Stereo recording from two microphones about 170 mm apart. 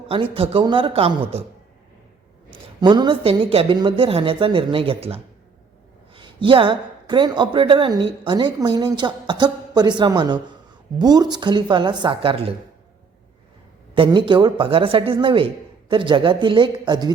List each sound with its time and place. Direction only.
0.1 s speech: 35° right (ahead or behind)
2.5 s a woman's voice: 25° right (ahead or behind)
13.9 s a woman's voice: 30° right (ahead or behind)